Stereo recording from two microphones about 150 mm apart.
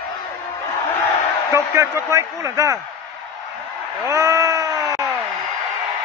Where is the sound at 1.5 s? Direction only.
20° right (ahead or behind).